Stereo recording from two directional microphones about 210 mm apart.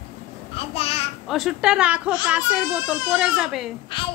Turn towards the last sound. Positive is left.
turn(degrees=25)  # may be behind; listen again after turning